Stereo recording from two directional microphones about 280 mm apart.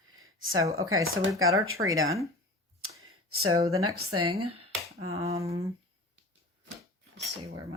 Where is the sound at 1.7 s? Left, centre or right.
Centre.